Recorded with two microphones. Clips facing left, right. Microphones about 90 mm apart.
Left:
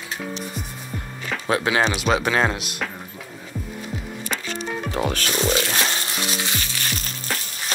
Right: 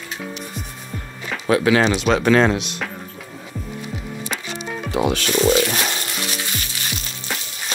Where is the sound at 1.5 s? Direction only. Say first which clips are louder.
Right 5 dB; 20° left (ahead or behind).